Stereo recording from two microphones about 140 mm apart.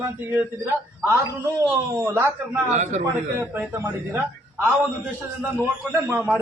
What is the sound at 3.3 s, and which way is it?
Speech, 15° right (ahead or behind).